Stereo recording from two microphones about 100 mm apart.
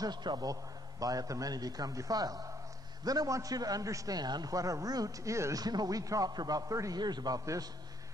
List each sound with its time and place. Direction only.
0.0 s a man's voice: 45° right (ahead or behind)